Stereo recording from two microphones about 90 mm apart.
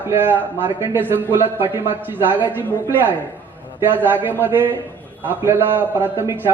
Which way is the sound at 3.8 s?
20° right (ahead or behind).